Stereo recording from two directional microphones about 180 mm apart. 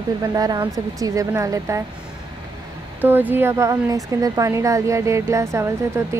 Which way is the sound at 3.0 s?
10° right (ahead or behind).